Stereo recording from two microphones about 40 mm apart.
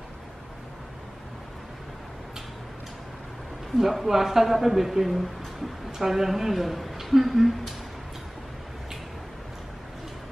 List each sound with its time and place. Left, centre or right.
3.7 s speech: centre